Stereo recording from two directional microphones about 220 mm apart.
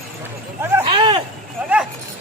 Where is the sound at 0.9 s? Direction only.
20° right (ahead or behind).